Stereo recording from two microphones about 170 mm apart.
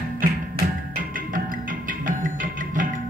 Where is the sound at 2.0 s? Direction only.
50° right (ahead or behind).